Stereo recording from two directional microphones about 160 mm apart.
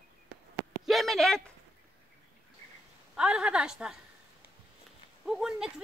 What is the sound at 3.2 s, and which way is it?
Speech, 5° right (ahead or behind).